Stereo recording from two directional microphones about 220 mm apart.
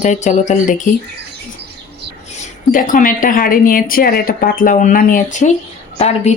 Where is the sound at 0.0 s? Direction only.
35° left (ahead or behind).